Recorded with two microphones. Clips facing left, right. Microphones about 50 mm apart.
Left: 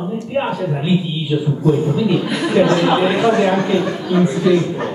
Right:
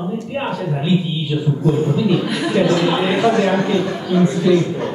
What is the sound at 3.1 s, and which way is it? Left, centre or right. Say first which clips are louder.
Speech: left 1 dB; centre.